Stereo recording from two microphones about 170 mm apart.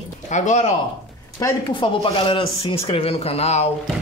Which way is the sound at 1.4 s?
30° left (ahead or behind).